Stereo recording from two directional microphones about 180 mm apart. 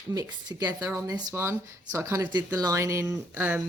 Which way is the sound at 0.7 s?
10° right (ahead or behind).